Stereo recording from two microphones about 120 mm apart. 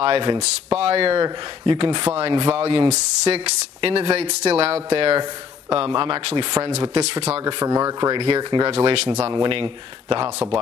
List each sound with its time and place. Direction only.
0.0 s speech: 45° right (ahead or behind)
0.4 s speech: 55° right (ahead or behind)
6.8 s speech: 55° right (ahead or behind)
7.6 s speech: 25° right (ahead or behind)
8.4 s speech: 35° right (ahead or behind)
8.6 s speech: 55° right (ahead or behind)
9.3 s speech: 45° right (ahead or behind)